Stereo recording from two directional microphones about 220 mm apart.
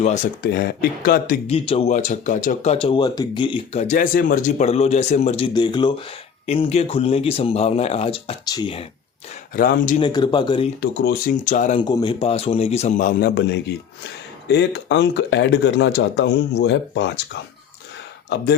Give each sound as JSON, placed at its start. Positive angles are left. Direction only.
{"t": 0.0, "sound": "speech", "side_deg": 30}
{"t": 0.5, "sound": "speech", "side_deg": 45}
{"t": 1.5, "sound": "speech", "side_deg": 25}
{"t": 9.6, "sound": "speech", "side_deg": 40}
{"t": 10.0, "sound": "speech", "side_deg": 20}
{"t": 10.8, "sound": "speech", "side_deg": 45}
{"t": 11.8, "sound": "speech", "side_deg": 20}